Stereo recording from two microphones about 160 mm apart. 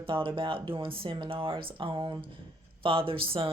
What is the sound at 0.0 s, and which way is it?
Speech, 35° right (ahead or behind).